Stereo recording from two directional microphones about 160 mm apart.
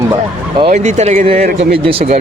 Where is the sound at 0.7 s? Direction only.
45° right (ahead or behind).